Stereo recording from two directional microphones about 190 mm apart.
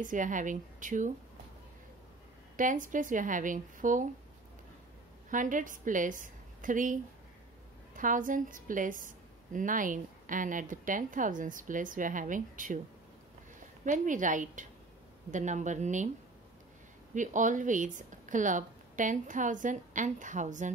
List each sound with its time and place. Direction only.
0.0 s a woman's voice: 45° right (ahead or behind)
2.5 s a woman's voice: 45° right (ahead or behind)
5.3 s a woman's voice: 45° right (ahead or behind)
13.8 s speech: 40° right (ahead or behind)
17.1 s speech: 40° right (ahead or behind)